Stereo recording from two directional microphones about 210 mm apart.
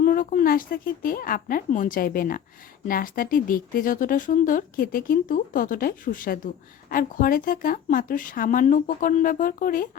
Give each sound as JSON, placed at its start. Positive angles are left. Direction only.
{"t": 0.0, "sound": "a woman's voice", "side_deg": 40}